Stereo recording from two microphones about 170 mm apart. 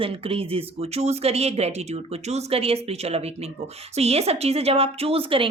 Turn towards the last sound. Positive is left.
turn(degrees=-35)  # may be behind; listen again after turning